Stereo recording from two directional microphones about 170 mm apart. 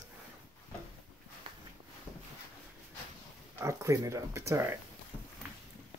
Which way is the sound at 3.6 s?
15° right (ahead or behind).